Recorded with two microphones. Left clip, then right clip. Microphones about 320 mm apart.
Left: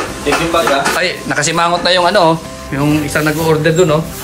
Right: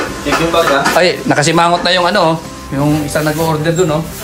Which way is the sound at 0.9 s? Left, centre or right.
Centre.